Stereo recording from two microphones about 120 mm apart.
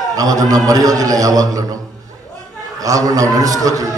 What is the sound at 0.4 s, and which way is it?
A man's voice, 30° right (ahead or behind).